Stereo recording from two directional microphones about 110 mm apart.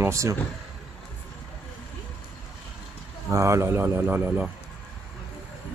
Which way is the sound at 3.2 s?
25° right (ahead or behind).